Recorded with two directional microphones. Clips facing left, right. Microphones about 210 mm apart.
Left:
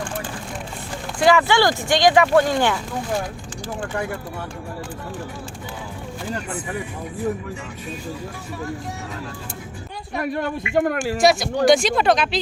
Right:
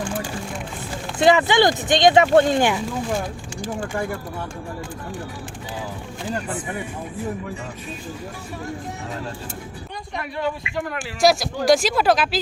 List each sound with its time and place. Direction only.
1.2 s speech: 20° right (ahead or behind)
10.2 s speech: 45° left (ahead or behind)
11.2 s speech: centre (ahead or behind)